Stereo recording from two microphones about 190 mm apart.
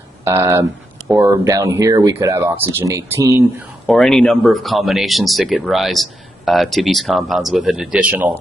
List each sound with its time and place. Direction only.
0.2 s speech: 15° right (ahead or behind)
3.8 s speech: 5° left (ahead or behind)